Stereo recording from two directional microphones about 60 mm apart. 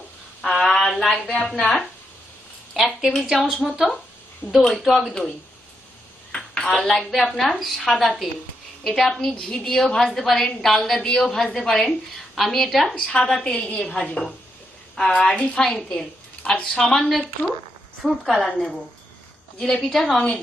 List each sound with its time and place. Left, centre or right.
0.5 s a sound: centre
1.1 s a woman's voice: centre
2.7 s a woman's voice: centre
4.6 s a woman's voice: centre
6.3 s dishes: centre
6.7 s a woman's voice: centre
13.1 s a woman's voice: centre
15.9 s a sound: centre
16.6 s a woman's voice: centre
18.0 s a woman's voice: centre